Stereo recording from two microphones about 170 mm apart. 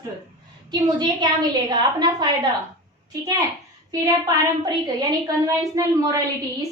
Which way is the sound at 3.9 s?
20° right (ahead or behind).